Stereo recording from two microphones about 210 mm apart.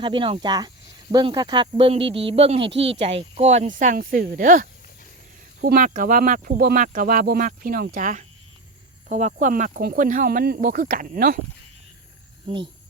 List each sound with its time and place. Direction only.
0.0 s speech: 25° right (ahead or behind)
2.6 s speech: 60° right (ahead or behind)
2.9 s speech: 30° right (ahead or behind)
12.5 s speech: 25° right (ahead or behind)